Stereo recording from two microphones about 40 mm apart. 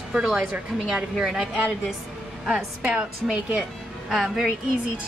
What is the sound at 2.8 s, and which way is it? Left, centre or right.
Speech, right.